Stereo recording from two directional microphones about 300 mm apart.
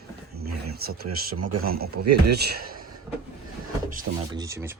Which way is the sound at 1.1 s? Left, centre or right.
Right.